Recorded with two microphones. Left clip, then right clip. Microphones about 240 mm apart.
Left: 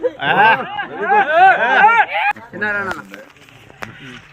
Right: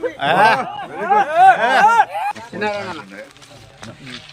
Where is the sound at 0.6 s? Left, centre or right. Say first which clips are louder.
Left 2 dB; right.